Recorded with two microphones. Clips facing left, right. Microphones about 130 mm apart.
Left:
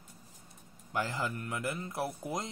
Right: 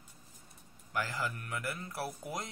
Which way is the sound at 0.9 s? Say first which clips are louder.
Left 2 dB; 25° left (ahead or behind).